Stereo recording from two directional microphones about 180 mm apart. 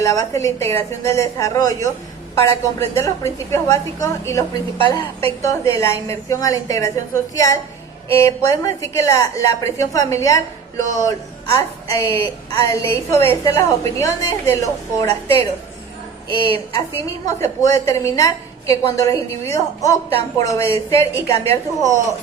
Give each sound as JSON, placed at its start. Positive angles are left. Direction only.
{"t": 0.0, "sound": "a woman's voice", "side_deg": 20}
{"t": 17.2, "sound": "a woman's voice", "side_deg": 20}